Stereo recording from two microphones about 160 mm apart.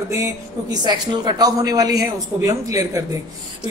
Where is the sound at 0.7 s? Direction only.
25° right (ahead or behind).